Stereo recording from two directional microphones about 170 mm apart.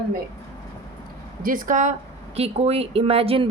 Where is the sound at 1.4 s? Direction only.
55° right (ahead or behind).